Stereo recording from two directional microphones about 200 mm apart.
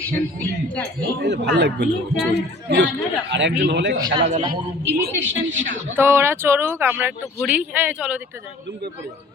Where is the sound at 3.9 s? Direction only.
20° right (ahead or behind).